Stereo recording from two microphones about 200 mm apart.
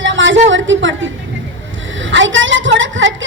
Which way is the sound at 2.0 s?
70° right (ahead or behind).